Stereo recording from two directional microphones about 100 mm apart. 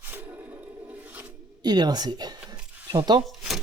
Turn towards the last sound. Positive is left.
turn(degrees=0)  # may be behind; listen again after turning